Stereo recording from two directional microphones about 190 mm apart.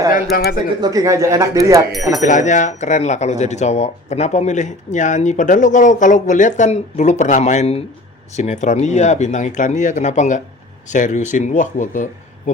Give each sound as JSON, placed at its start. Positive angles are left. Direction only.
{"t": 0.1, "sound": "speech", "side_deg": 55}
{"t": 0.8, "sound": "speech", "side_deg": -20}
{"t": 2.2, "sound": "speech", "side_deg": 40}